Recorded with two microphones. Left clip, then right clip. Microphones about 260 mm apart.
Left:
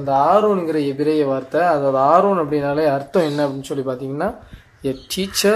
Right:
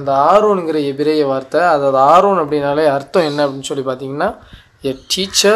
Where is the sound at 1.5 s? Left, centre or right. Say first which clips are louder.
Right 5 dB; right.